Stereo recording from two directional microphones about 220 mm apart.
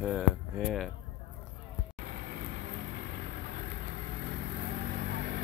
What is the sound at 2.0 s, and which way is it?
Vehicle, 45° right (ahead or behind).